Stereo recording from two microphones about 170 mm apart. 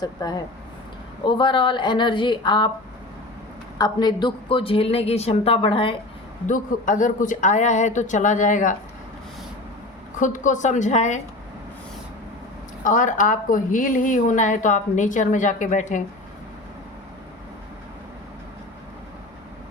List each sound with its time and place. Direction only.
0.0 s speech: 20° left (ahead or behind)
3.8 s a woman's voice: 25° left (ahead or behind)
6.5 s a woman's voice: 50° left (ahead or behind)
10.2 s a woman's voice: 50° left (ahead or behind)
12.8 s a woman's voice: 50° left (ahead or behind)